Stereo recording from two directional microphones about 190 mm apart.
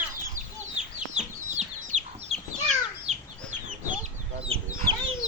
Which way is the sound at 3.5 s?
40° right (ahead or behind).